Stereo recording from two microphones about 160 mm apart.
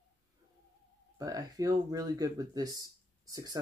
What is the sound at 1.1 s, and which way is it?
Speech, 25° right (ahead or behind).